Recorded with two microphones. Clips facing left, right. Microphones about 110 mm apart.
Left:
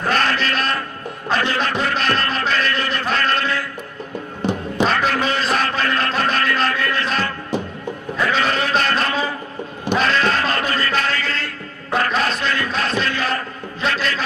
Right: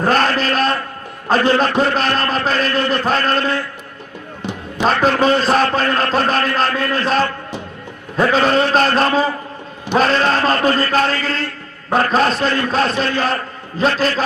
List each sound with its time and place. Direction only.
0.0 s a sound: 35° right (ahead or behind)
1.3 s a man's voice: 40° right (ahead or behind)
4.8 s a man's voice: 40° right (ahead or behind)